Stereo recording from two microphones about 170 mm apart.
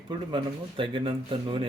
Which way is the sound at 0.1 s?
30° right (ahead or behind).